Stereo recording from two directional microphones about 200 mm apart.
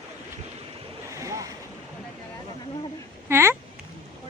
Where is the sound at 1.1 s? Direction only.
15° right (ahead or behind).